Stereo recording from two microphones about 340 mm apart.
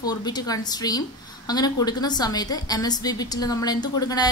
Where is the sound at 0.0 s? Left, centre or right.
Centre.